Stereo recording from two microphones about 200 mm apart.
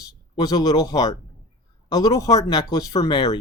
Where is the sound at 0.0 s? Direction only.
20° left (ahead or behind).